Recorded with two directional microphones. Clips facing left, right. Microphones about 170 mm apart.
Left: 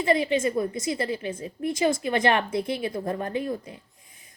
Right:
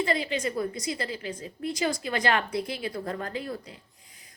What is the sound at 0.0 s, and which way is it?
A woman's voice, 20° left (ahead or behind).